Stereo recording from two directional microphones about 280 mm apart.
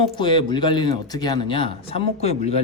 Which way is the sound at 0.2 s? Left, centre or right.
Centre.